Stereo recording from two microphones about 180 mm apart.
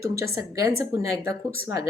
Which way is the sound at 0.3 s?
15° right (ahead or behind).